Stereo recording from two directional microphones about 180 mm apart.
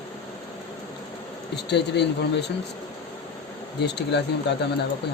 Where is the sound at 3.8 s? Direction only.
70° left (ahead or behind).